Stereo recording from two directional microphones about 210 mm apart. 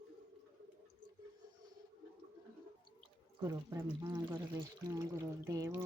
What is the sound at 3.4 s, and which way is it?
Speech, 15° right (ahead or behind).